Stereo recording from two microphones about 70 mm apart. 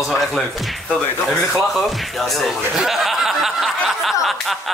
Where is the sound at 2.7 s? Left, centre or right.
Centre.